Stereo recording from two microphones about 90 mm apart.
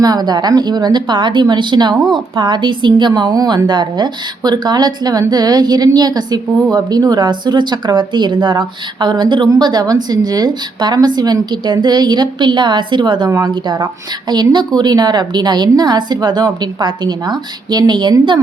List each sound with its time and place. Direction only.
0.0 s a woman's voice: 50° right (ahead or behind)